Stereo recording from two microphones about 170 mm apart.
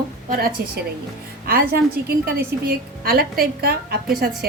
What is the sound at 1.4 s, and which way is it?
Speech, 60° right (ahead or behind).